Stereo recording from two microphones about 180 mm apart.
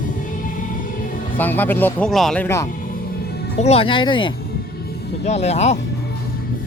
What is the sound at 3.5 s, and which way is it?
Speech, 35° left (ahead or behind).